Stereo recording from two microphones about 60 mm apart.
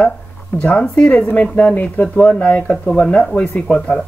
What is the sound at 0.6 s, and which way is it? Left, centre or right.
Speech, left.